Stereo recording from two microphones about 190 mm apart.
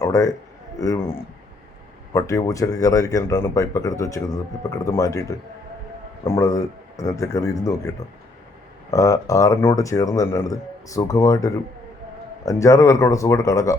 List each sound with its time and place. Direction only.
0.0 s speech: 15° left (ahead or behind)
2.1 s speech: 15° left (ahead or behind)
6.2 s speech: 15° left (ahead or behind)
8.9 s speech: 15° left (ahead or behind)